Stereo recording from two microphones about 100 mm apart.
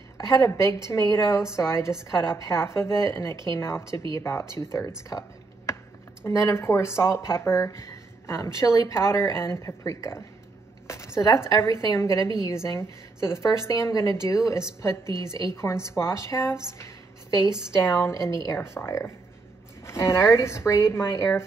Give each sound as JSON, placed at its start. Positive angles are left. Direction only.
{"t": 0.2, "sound": "speech", "side_deg": 25}
{"t": 6.2, "sound": "a woman's voice", "side_deg": 30}
{"t": 15.0, "sound": "a woman's voice", "side_deg": -50}
{"t": 15.5, "sound": "speech", "side_deg": 30}